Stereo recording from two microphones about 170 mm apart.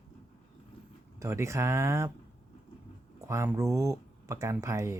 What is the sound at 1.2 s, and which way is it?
Speech, 15° right (ahead or behind).